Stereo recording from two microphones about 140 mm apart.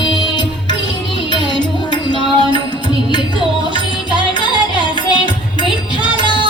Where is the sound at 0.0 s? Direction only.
35° left (ahead or behind).